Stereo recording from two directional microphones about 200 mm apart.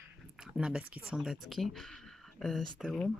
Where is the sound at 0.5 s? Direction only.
5° right (ahead or behind).